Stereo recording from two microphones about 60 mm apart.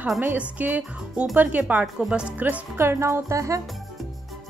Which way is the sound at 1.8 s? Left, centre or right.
Centre.